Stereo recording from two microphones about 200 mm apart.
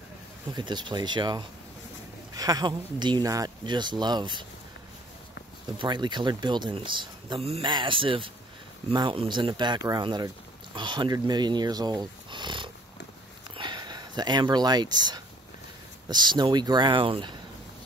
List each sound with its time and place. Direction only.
0.5 s speech: 20° right (ahead or behind)
5.8 s speech: 25° right (ahead or behind)